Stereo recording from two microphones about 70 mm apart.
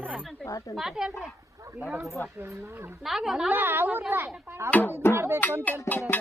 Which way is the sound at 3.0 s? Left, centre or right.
Centre.